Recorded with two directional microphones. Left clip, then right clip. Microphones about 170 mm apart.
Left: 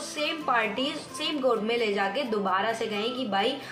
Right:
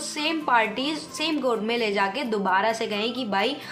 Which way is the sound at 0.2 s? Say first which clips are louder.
Right 4 dB; 35° right (ahead or behind).